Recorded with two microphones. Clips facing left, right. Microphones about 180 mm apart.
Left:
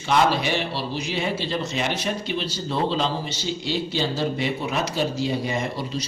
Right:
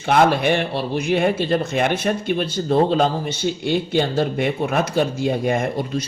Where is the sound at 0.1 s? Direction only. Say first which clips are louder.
Right 5 dB; 55° right (ahead or behind).